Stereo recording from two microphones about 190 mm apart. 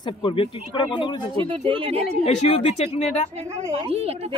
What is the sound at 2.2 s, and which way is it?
A woman's voice, 35° left (ahead or behind).